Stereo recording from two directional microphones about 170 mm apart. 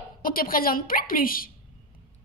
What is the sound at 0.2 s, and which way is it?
A woman's voice, 55° left (ahead or behind).